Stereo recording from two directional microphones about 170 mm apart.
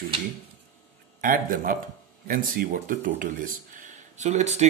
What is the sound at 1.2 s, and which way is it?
A man's voice, 55° right (ahead or behind).